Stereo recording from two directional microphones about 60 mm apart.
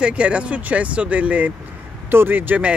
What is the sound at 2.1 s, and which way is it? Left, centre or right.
Speech, right.